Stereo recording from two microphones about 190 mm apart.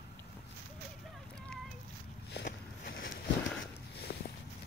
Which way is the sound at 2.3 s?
60° left (ahead or behind).